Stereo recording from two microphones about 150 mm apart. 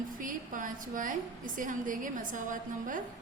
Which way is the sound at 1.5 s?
60° right (ahead or behind).